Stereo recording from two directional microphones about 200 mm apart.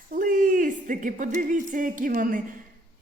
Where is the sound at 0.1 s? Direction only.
45° right (ahead or behind).